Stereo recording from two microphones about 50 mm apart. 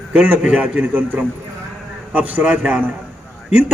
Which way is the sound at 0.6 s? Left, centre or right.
Right.